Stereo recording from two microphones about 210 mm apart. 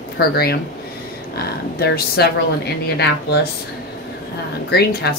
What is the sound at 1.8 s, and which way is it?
Speech, 50° left (ahead or behind).